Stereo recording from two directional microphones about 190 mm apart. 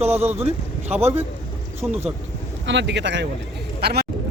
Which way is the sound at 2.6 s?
70° right (ahead or behind).